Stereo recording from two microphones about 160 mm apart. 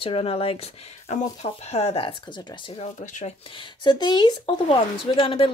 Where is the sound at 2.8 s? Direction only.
50° left (ahead or behind).